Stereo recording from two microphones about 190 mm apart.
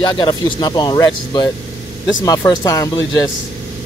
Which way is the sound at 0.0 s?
25° left (ahead or behind).